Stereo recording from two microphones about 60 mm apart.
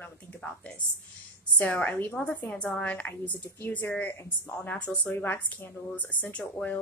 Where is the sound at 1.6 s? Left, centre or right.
Left.